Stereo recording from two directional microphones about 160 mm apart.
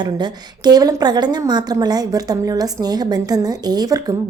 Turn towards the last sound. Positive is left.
turn(degrees=-25)  # may be behind; listen again after turning